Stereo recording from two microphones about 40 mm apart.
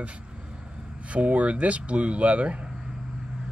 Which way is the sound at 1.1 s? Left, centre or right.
Right.